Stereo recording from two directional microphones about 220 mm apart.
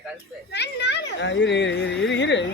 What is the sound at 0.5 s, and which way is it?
A child's voice, 50° left (ahead or behind).